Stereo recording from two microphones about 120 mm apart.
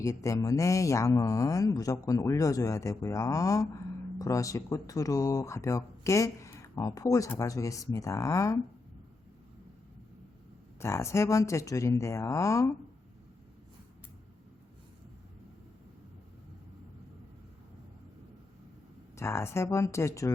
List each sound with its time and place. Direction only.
0.0 s speech: 25° left (ahead or behind)
10.8 s speech: 25° left (ahead or behind)
19.1 s speech: 20° left (ahead or behind)